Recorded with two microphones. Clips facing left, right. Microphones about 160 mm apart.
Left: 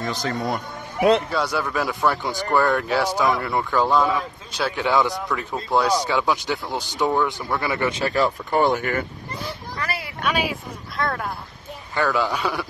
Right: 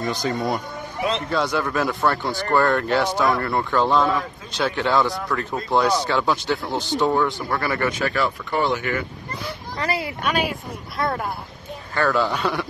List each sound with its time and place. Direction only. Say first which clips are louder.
0.0 s speech: right 2 dB; centre (ahead or behind)
5.4 s speech: right 1 dB; 5° left (ahead or behind)
6.3 s speech: right 2 dB; centre (ahead or behind)
7.2 s speech: right 1 dB; 15° left (ahead or behind)
7.9 s speech: left 2 dB; 30° left (ahead or behind)
9.8 s speech: right 6 dB; 25° right (ahead or behind)
10.2 s speech: left 2 dB; centre (ahead or behind)
12.3 s speech: right 1 dB; 5° left (ahead or behind)